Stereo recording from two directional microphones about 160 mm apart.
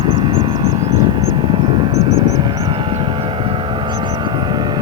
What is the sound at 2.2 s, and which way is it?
Vehicle, 25° right (ahead or behind).